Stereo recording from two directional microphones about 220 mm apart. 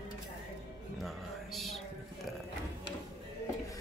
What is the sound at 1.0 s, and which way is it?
Music, centre (ahead or behind).